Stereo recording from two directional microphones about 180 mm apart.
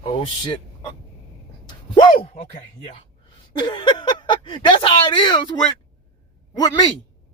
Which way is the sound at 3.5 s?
25° left (ahead or behind).